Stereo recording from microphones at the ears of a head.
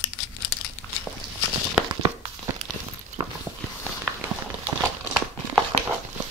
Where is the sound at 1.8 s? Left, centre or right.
Right.